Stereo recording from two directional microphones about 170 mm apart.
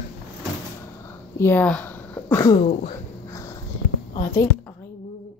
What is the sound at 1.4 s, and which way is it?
Speech, 10° left (ahead or behind).